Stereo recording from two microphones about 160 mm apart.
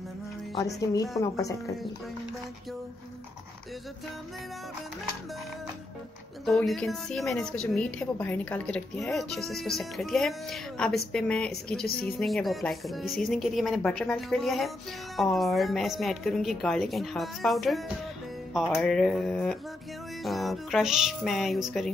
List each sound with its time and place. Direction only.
0.6 s speech: 20° left (ahead or behind)
6.4 s a woman's voice: centre (ahead or behind)
11.8 s a woman's voice: 70° left (ahead or behind)
12.2 s a woman's voice: centre (ahead or behind)